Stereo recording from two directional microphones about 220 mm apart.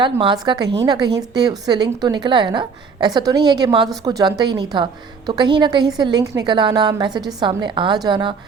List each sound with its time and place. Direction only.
0.0 s a woman's voice: 20° right (ahead or behind)